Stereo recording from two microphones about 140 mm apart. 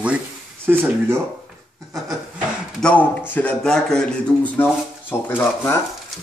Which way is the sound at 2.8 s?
10° left (ahead or behind).